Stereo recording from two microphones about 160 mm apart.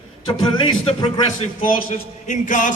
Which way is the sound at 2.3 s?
50° left (ahead or behind).